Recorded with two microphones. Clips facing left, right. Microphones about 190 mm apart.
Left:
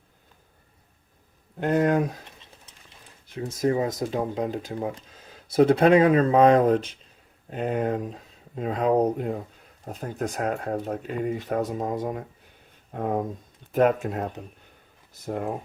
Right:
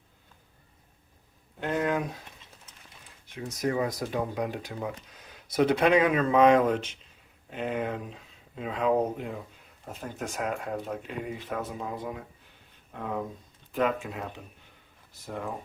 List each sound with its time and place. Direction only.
1.5 s speech: 45° left (ahead or behind)
3.3 s speech: 30° left (ahead or behind); by 15.5 s 50° left (ahead or behind)